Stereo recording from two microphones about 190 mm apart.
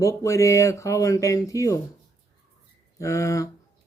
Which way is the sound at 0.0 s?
15° left (ahead or behind).